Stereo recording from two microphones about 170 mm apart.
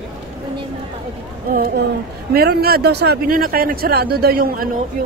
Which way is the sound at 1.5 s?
60° right (ahead or behind).